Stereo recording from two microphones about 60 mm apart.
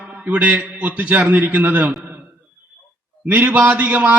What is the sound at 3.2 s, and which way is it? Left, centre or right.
Speech, right.